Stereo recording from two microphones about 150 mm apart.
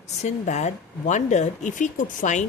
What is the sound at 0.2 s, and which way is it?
Speech, 50° left (ahead or behind).